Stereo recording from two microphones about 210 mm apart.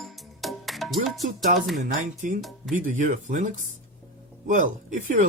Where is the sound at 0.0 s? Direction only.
Centre (ahead or behind).